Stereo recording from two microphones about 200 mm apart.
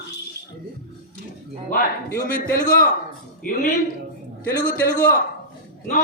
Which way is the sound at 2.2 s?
45° left (ahead or behind).